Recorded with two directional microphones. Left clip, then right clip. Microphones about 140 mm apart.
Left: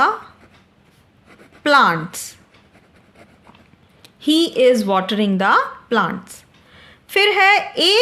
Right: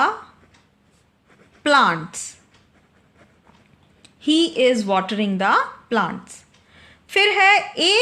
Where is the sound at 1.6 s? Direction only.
30° left (ahead or behind).